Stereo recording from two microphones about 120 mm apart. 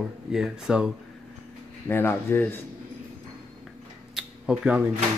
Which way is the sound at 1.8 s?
20° left (ahead or behind).